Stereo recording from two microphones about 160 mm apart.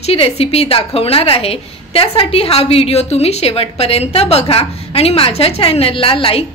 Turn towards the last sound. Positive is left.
turn(degrees=35)  # may be behind; listen again after turning